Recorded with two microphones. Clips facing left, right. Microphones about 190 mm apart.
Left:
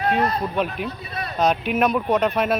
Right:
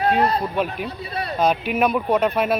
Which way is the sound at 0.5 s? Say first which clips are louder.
Even; 5° right (ahead or behind).